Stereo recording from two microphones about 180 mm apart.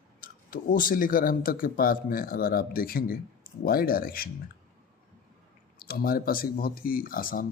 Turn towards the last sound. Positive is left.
turn(degrees=50)  # may be behind; listen again after turning